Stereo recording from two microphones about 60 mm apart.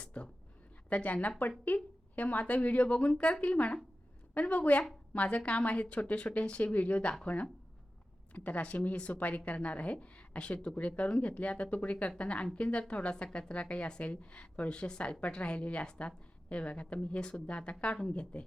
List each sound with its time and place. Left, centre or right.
0.0 s a sound: left
0.9 s a woman's voice: left
8.3 s a woman's voice: left